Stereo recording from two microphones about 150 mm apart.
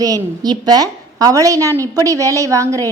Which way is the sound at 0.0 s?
25° right (ahead or behind).